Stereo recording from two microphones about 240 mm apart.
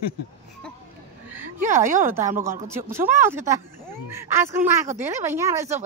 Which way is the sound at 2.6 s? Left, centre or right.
Centre.